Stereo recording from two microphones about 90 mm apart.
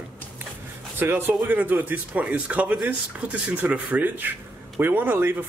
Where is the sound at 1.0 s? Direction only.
20° right (ahead or behind).